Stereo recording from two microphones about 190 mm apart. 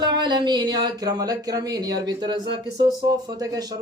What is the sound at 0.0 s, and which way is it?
Speech, 25° right (ahead or behind).